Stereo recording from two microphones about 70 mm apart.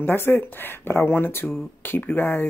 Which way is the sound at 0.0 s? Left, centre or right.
Left.